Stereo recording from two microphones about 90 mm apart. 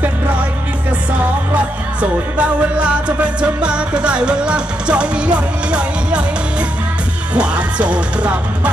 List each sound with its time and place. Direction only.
1.5 s music: 15° right (ahead or behind)
7.3 s music: 15° right (ahead or behind)